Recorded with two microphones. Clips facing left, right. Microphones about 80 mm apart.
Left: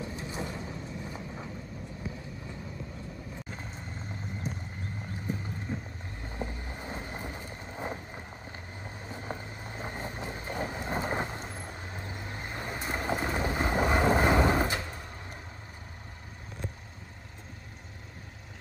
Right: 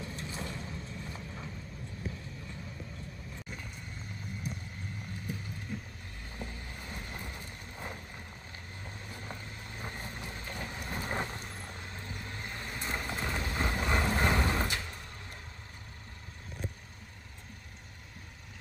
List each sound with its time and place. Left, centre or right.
0.0 s vehicle: centre
5.7 s boat: left
6.2 s vehicle: left